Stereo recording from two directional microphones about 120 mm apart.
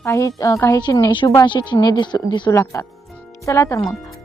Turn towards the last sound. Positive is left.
turn(degrees=25)  # may be behind; listen again after turning